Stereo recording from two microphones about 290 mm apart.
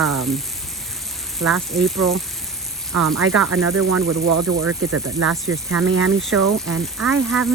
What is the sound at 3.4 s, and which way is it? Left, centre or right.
Speech, right.